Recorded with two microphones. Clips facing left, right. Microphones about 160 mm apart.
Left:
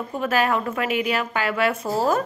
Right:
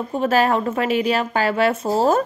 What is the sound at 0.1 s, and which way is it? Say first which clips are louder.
A woman's voice: right 4 dB; 30° right (ahead or behind).